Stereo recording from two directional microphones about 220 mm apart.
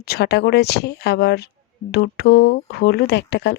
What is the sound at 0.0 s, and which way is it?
A woman's voice, 45° left (ahead or behind).